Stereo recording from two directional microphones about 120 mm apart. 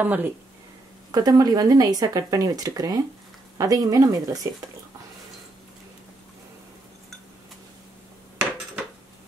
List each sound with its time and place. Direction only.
0.0 s speech: 15° right (ahead or behind)
1.1 s speech: 35° right (ahead or behind)